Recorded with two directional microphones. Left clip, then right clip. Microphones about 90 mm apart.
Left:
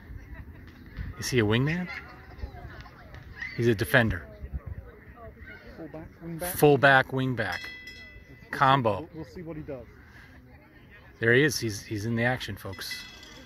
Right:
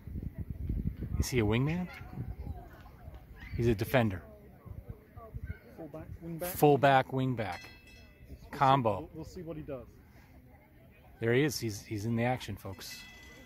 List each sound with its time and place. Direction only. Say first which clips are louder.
1.1 s speech: left 6 dB; 10° right (ahead or behind)
1.9 s speech: left 10 dB; 15° left (ahead or behind)
3.5 s speech: left 6 dB; 15° right (ahead or behind)
6.3 s speech: left 4 dB; 15° right (ahead or behind)
11.1 s speech: left 7 dB; 15° right (ahead or behind)